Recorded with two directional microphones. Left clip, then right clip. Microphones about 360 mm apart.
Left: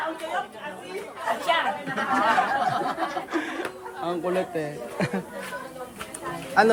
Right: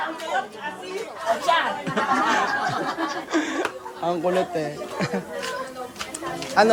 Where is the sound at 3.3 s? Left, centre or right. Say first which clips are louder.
Right 5 dB; centre.